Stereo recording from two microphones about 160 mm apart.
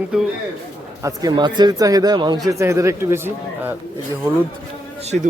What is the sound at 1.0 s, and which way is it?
Speech, 25° right (ahead or behind).